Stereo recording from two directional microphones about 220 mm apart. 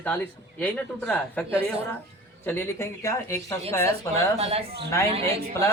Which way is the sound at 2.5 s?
10° left (ahead or behind).